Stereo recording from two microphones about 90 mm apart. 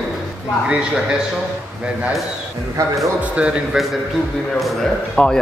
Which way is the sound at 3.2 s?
15° right (ahead or behind).